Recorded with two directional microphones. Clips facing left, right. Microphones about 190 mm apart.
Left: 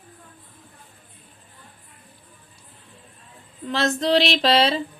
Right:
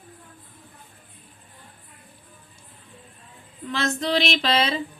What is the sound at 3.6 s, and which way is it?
Speech, 35° left (ahead or behind).